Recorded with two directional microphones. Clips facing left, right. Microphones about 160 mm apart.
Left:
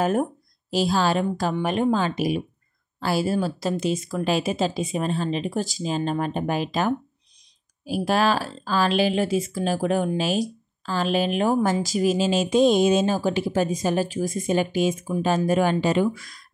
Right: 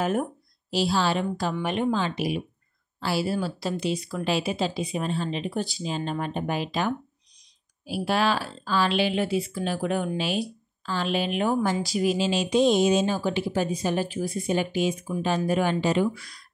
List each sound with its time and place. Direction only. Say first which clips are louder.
0.0 s speech: left 3 dB; 40° left (ahead or behind)